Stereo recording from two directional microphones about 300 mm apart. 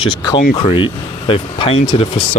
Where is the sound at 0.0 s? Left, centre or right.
Centre.